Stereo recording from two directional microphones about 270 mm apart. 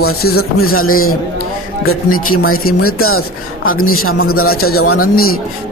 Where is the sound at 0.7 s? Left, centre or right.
Left.